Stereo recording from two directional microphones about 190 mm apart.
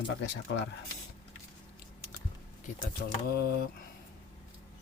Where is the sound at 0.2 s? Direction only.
65° left (ahead or behind).